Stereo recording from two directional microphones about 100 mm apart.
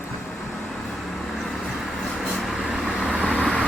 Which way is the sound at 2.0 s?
Centre (ahead or behind).